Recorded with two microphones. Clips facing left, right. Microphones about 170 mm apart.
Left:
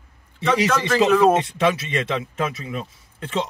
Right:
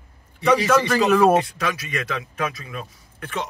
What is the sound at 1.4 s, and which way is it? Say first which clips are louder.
Speech: left 6 dB; 25° left (ahead or behind).